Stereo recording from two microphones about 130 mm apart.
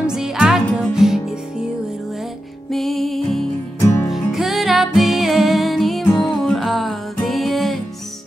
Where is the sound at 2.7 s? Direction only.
Centre (ahead or behind).